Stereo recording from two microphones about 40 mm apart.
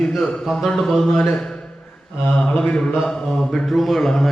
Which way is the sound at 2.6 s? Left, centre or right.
Left.